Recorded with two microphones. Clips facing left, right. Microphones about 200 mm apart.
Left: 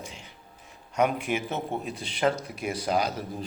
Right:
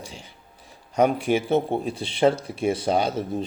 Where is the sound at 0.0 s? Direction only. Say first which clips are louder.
Right 2 dB; 30° right (ahead or behind).